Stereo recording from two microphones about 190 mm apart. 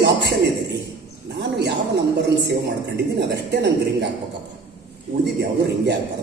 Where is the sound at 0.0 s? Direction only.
60° right (ahead or behind).